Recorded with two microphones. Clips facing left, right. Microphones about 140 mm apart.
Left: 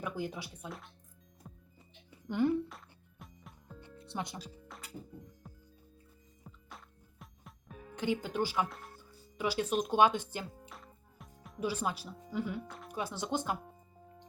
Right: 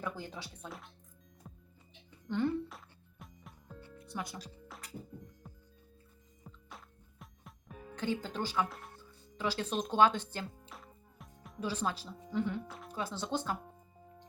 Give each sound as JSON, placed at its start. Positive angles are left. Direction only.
{"t": 0.0, "sound": "speech", "side_deg": 15}
{"t": 1.5, "sound": "music", "side_deg": 0}
{"t": 2.0, "sound": "music", "side_deg": 10}
{"t": 2.6, "sound": "music", "side_deg": 0}
{"t": 3.8, "sound": "music", "side_deg": 25}
{"t": 4.4, "sound": "music", "side_deg": 5}
{"t": 7.9, "sound": "speech", "side_deg": 15}
{"t": 10.7, "sound": "music", "side_deg": 0}
{"t": 11.6, "sound": "speech", "side_deg": 10}
{"t": 12.9, "sound": "speech", "side_deg": 15}